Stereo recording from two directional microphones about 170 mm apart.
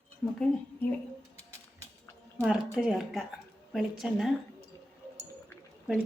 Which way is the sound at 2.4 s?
5° right (ahead or behind).